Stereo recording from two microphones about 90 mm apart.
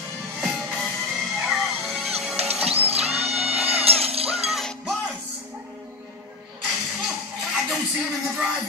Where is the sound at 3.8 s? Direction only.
90° right.